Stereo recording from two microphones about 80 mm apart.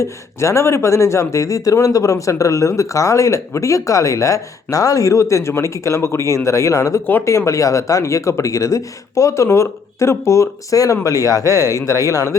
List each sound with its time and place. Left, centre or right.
0.0 s speech: left